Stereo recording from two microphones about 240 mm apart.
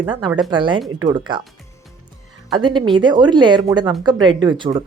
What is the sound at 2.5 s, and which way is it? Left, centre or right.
A woman's voice, centre.